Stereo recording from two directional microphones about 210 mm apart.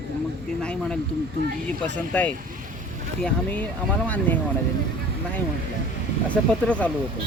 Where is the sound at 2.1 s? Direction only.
5° left (ahead or behind).